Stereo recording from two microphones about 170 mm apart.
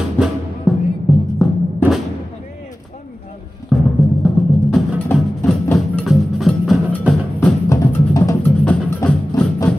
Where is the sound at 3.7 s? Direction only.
Centre (ahead or behind).